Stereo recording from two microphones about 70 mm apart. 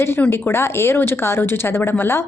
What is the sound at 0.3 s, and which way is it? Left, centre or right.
A woman's voice, left.